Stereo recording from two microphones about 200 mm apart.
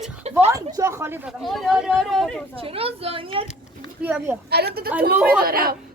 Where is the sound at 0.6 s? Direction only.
15° right (ahead or behind); by 2.4 s centre (ahead or behind).